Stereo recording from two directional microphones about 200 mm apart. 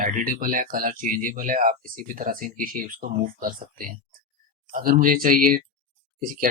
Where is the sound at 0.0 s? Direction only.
45° right (ahead or behind).